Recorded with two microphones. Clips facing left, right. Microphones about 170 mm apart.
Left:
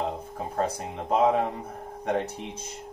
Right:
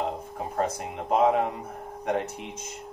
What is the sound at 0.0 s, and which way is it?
Speech, 35° left (ahead or behind).